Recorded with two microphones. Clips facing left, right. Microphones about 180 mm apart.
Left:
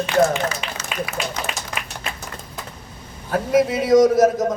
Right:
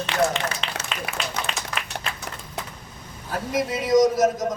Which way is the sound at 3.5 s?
55° left (ahead or behind).